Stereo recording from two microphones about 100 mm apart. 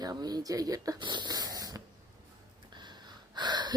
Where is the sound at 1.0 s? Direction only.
50° right (ahead or behind).